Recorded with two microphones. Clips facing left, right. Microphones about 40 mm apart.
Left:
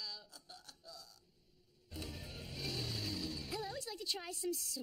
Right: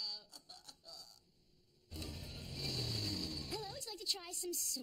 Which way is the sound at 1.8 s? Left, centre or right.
Centre.